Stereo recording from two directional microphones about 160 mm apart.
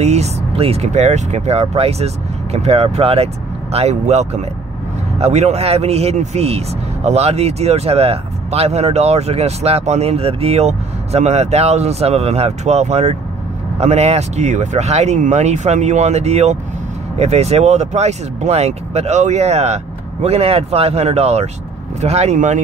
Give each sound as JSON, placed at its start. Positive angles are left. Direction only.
{"t": 0.0, "sound": "speech", "side_deg": -45}